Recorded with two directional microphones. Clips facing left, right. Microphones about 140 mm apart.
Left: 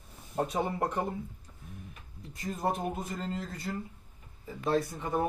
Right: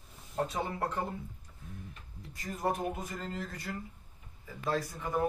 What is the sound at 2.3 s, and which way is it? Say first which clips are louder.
Speech: left 1 dB; 25° left (ahead or behind).